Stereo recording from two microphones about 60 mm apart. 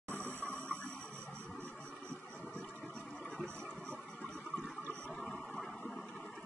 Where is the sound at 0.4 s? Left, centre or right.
Left.